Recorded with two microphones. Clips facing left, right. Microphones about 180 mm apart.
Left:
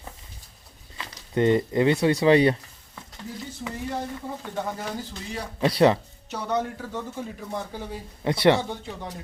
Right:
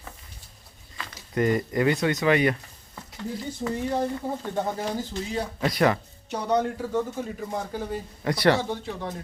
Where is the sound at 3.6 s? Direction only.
35° right (ahead or behind).